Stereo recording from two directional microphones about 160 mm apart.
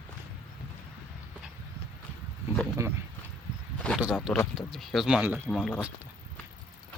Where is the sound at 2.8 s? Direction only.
20° right (ahead or behind).